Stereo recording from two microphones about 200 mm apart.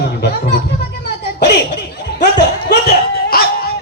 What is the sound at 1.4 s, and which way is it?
Laughter, 60° left (ahead or behind).